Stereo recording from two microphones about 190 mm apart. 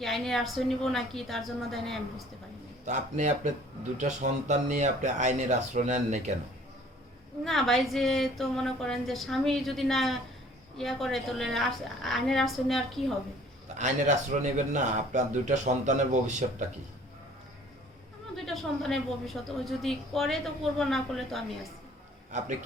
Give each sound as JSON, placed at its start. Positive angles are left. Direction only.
{"t": 0.0, "sound": "a woman's voice", "side_deg": 0}
{"t": 2.8, "sound": "speech", "side_deg": -40}
{"t": 7.4, "sound": "a woman's voice", "side_deg": 0}
{"t": 13.7, "sound": "speech", "side_deg": -40}
{"t": 18.4, "sound": "a woman's voice", "side_deg": 0}